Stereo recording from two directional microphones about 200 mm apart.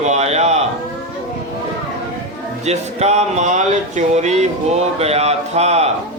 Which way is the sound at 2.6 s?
35° right (ahead or behind).